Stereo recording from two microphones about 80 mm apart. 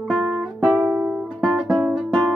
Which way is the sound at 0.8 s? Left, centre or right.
Centre.